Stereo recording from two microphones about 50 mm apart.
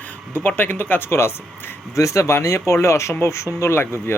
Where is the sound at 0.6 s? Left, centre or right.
Left.